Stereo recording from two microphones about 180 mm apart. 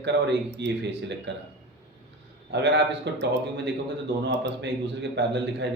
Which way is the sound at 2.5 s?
75° right (ahead or behind).